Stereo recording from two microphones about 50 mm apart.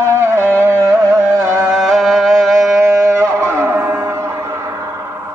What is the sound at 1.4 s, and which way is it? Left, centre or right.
Carnatic music, right.